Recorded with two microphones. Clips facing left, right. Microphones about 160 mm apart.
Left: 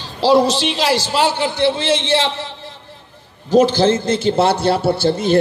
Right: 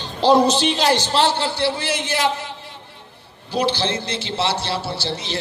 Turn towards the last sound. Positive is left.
turn(degrees=50)  # may be behind; listen again after turning